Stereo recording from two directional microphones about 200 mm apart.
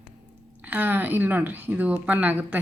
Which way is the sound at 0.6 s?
10° right (ahead or behind).